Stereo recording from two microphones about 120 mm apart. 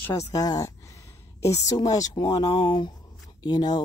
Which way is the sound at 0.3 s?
30° left (ahead or behind).